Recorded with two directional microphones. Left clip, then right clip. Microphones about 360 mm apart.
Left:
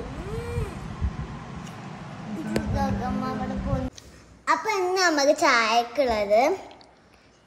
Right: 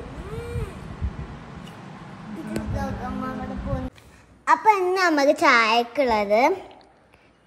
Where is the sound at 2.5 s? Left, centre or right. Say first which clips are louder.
Left 3 dB; centre.